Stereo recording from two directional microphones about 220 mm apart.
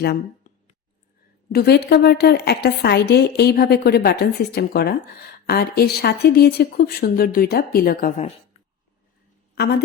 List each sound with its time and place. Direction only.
1.5 s a woman's voice: 45° left (ahead or behind)